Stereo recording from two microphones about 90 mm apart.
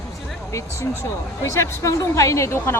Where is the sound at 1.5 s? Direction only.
35° left (ahead or behind).